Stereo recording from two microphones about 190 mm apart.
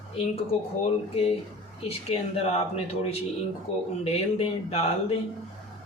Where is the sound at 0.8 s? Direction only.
30° left (ahead or behind).